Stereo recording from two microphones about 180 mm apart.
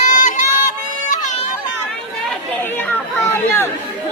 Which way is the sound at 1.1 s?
45° left (ahead or behind).